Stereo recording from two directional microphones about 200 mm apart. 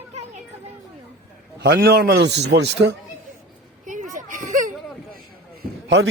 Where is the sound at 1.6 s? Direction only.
55° right (ahead or behind).